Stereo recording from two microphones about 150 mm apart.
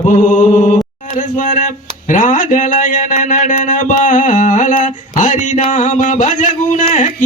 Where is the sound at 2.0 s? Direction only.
60° left (ahead or behind).